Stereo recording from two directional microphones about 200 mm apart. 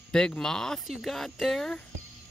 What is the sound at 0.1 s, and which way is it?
Speech, 5° left (ahead or behind).